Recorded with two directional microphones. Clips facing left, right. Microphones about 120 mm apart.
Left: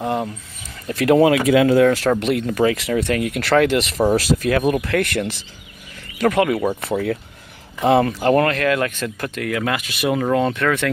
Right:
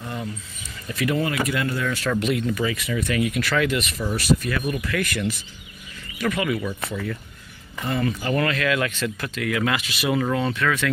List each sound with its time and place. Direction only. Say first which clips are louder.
0.0 s a sound: left 10 dB; 80° left
0.8 s speech: left 10 dB; 70° left (ahead or behind); by 1.9 s 90° left
2.1 s speech: left 4 dB; 60° left (ahead or behind)
7.8 s speech: left 10 dB; 90° left
8.4 s speech: left 5 dB; 45° left (ahead or behind)